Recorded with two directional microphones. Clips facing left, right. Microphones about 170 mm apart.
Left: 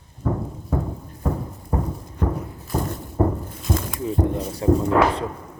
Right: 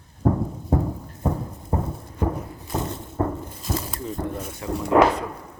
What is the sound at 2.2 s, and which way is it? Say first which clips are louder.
Music: even; 10° right (ahead or behind).